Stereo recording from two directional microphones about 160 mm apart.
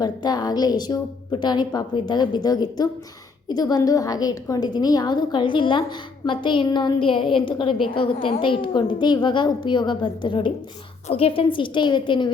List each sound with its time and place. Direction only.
0.0 s a woman's voice: 25° left (ahead or behind)